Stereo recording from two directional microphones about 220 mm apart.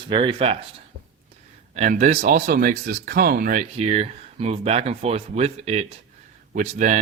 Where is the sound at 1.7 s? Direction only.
35° right (ahead or behind).